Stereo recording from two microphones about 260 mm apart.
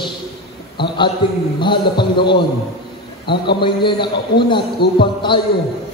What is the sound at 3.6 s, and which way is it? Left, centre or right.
Music, centre.